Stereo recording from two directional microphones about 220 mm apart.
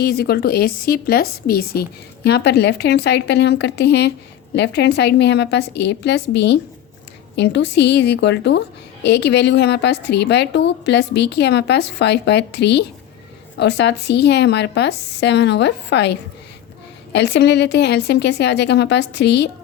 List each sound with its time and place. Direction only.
0.0 s a woman's voice: 45° left (ahead or behind)